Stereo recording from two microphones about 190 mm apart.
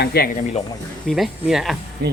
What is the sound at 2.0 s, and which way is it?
Speech, 60° right (ahead or behind).